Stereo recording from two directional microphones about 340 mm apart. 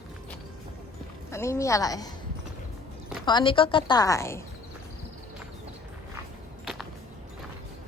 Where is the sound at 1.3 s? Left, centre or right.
Centre.